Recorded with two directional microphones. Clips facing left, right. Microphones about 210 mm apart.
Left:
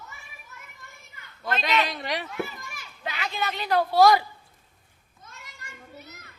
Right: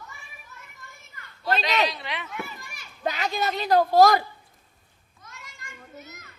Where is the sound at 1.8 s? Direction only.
45° left (ahead or behind).